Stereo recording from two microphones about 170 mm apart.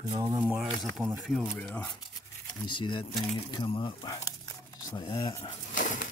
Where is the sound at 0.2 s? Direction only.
15° right (ahead or behind).